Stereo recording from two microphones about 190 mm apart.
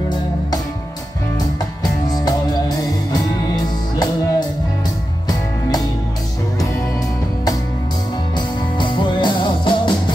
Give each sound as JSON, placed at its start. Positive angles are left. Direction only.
{"t": 2.0, "sound": "music", "side_deg": 20}
{"t": 8.4, "sound": "music", "side_deg": 25}